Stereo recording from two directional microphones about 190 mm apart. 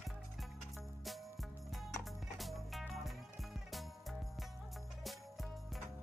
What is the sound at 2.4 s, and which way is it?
Music, centre (ahead or behind).